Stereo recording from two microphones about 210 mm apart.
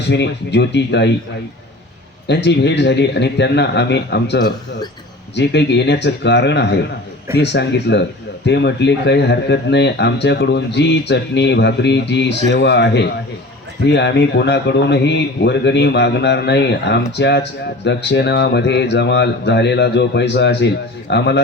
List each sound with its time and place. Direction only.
0.1 s speech: 55° left (ahead or behind)
2.2 s speech: 55° left (ahead or behind)